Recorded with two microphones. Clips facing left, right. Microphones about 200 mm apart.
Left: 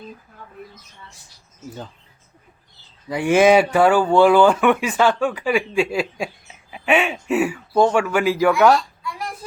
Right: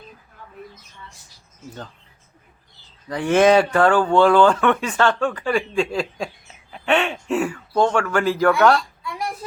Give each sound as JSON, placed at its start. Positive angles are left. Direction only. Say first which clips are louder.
{"t": 3.1, "sound": "a man's voice", "louder": "left 1 dB", "side_deg": 10}